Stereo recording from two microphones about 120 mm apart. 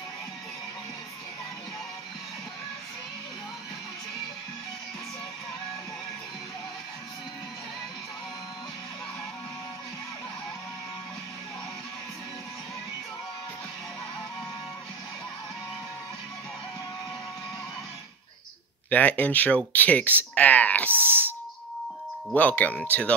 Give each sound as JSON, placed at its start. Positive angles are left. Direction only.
{"t": 18.9, "sound": "speech", "side_deg": 15}
{"t": 20.3, "sound": "a sound", "side_deg": 15}
{"t": 20.9, "sound": "speech", "side_deg": -15}
{"t": 22.3, "sound": "speech", "side_deg": 10}